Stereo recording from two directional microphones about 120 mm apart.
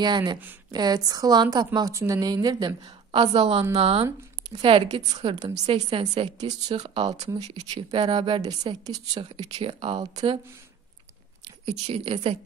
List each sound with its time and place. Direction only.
0.0 s a woman's voice: 40° right (ahead or behind)
1.9 s a woman's voice: 25° right (ahead or behind); by 4.1 s 55° right (ahead or behind)
4.5 s a woman's voice: 45° right (ahead or behind)
7.9 s a woman's voice: 45° right (ahead or behind)
9.2 s a woman's voice: 55° right (ahead or behind)
11.6 s speech: 60° right (ahead or behind)